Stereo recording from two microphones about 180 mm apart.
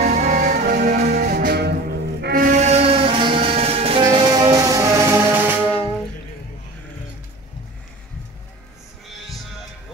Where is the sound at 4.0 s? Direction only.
25° right (ahead or behind).